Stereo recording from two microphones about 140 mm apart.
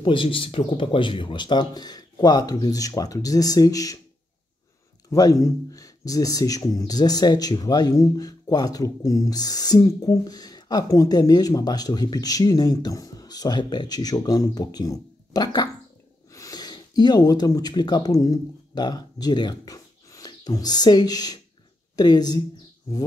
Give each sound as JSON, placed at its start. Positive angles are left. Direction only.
{"t": 0.0, "sound": "speech", "side_deg": 35}
{"t": 5.1, "sound": "speech", "side_deg": 25}